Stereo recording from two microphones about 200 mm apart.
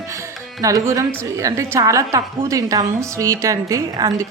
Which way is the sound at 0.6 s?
15° right (ahead or behind).